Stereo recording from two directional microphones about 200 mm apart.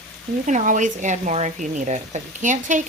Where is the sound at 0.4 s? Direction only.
40° right (ahead or behind).